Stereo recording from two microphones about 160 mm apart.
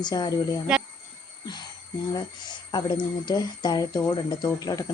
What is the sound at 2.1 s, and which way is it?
Speech, 30° left (ahead or behind).